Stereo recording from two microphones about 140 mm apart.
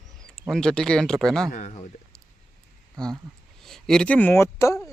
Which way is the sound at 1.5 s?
55° left (ahead or behind).